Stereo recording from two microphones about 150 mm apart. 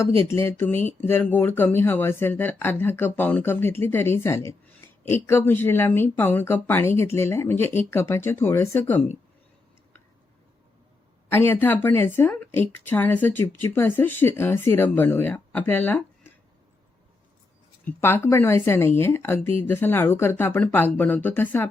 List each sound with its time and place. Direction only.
0.0 s a woman's voice: 15° left (ahead or behind)
11.3 s a woman's voice: 15° left (ahead or behind)
17.8 s a woman's voice: 15° left (ahead or behind)